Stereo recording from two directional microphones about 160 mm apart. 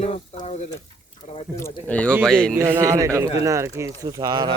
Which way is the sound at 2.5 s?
15° right (ahead or behind).